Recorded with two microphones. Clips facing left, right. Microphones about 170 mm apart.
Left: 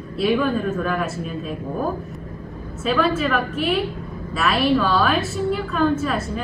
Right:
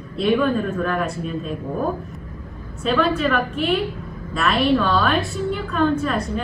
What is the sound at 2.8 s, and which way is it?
A woman's voice, centre (ahead or behind).